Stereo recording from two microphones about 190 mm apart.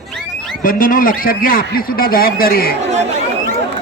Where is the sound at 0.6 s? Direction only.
45° left (ahead or behind).